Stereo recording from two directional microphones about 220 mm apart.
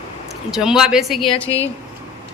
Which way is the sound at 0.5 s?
5° right (ahead or behind).